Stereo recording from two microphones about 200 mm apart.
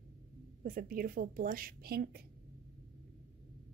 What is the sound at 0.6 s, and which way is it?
A woman's voice, 45° right (ahead or behind).